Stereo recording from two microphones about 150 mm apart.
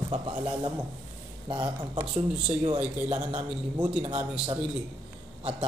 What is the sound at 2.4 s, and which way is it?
Speech, 35° right (ahead or behind).